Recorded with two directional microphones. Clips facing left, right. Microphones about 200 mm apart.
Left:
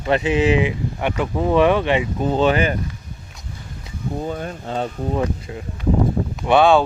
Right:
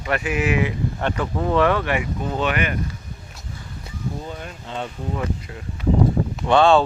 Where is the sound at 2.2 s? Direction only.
30° left (ahead or behind).